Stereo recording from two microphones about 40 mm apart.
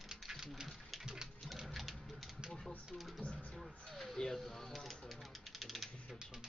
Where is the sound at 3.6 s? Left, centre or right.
Centre.